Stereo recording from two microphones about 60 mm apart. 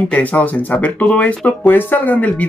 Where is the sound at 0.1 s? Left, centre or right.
Left.